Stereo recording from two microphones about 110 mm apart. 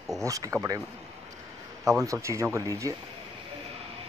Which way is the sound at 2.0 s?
25° right (ahead or behind).